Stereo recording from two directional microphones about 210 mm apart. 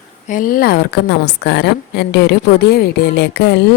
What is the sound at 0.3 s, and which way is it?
A woman's voice, 40° left (ahead or behind).